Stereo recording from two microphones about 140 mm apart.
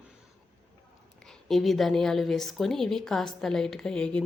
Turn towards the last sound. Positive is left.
turn(degrees=5)  # may be behind; listen again after turning